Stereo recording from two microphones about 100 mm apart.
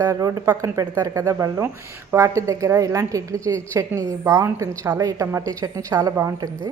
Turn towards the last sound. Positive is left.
turn(degrees=-35)  # may be behind; listen again after turning